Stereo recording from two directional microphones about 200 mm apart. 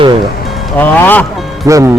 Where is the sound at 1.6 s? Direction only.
15° right (ahead or behind).